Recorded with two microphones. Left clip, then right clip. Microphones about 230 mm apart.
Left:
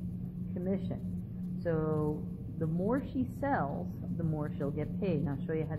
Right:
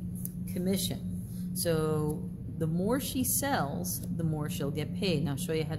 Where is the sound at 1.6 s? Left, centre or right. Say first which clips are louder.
Right 3 dB; right.